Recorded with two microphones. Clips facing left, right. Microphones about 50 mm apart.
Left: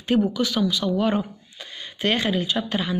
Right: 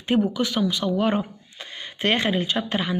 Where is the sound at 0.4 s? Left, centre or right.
Right.